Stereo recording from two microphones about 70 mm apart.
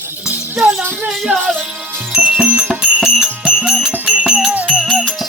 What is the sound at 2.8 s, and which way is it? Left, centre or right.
Music, centre.